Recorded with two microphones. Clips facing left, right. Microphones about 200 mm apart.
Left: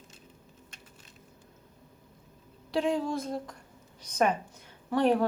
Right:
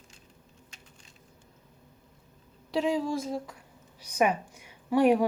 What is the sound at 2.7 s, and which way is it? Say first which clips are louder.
A woman's voice: right 1 dB; centre (ahead or behind).